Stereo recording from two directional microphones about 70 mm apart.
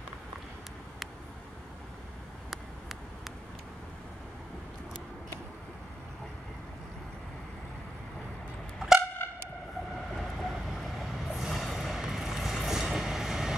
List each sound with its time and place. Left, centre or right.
8.7 s music: centre
10.1 s vehicle: centre